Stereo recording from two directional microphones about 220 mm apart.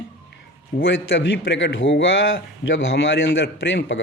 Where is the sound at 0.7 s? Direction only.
40° left (ahead or behind).